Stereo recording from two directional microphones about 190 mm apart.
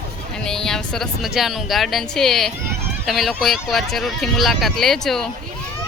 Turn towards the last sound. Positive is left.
turn(degrees=0)  # may be behind; listen again after turning